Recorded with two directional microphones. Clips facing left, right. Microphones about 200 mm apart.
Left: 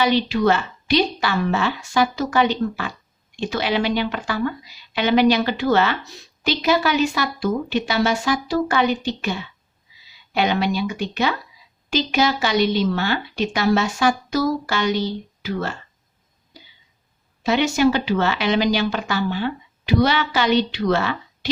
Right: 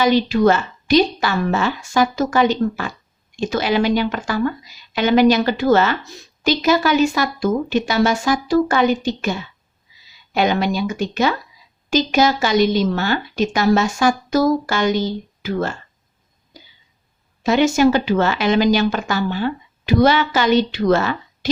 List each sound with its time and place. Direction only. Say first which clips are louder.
0.0 s a woman's voice: right 4 dB; 45° right (ahead or behind)
17.4 s a woman's voice: right 3 dB; 45° right (ahead or behind)